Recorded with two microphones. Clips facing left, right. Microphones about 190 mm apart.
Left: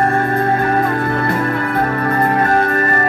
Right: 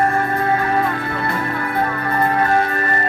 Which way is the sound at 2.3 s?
45° left (ahead or behind).